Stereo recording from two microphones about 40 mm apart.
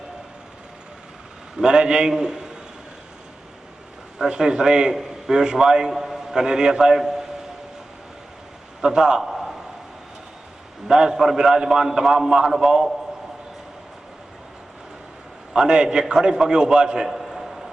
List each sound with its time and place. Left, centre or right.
1.5 s a man's voice: centre
4.3 s a man's voice: centre
8.8 s a man's voice: centre
9.2 s a sound: centre
10.8 s a man's voice: centre
15.5 s a man's voice: centre
17.3 s a sound: centre